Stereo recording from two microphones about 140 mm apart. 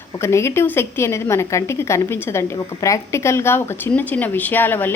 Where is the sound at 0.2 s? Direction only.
20° left (ahead or behind).